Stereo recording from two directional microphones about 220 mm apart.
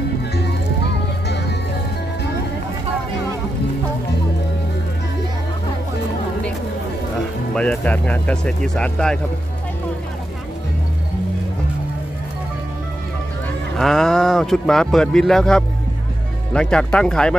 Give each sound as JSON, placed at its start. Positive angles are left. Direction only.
{"t": 7.5, "sound": "speech", "side_deg": 5}
{"t": 13.7, "sound": "speech", "side_deg": 0}